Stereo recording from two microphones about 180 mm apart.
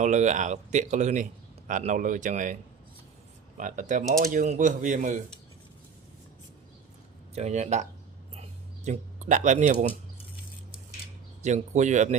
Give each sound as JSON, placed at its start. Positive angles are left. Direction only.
{"t": 0.0, "sound": "a man's voice", "side_deg": -40}
{"t": 3.6, "sound": "a man's voice", "side_deg": -45}
{"t": 7.3, "sound": "speech", "side_deg": -40}
{"t": 8.4, "sound": "a sound", "side_deg": -40}
{"t": 11.4, "sound": "speech", "side_deg": -40}